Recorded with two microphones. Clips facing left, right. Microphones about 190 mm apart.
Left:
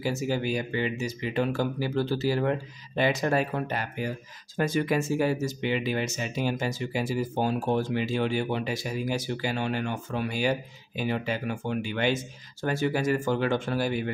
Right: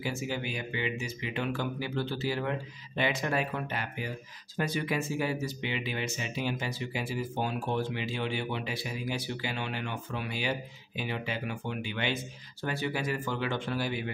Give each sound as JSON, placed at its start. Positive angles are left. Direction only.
{"t": 0.0, "sound": "speech", "side_deg": 40}